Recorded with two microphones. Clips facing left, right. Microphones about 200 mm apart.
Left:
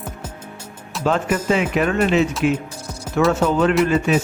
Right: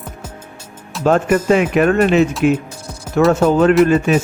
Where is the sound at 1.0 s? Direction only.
45° right (ahead or behind).